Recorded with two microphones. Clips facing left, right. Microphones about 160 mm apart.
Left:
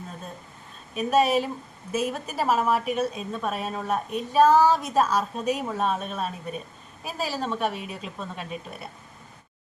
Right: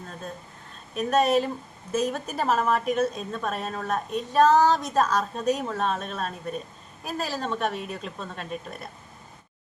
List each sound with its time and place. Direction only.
0.9 s a woman's voice: 5° left (ahead or behind)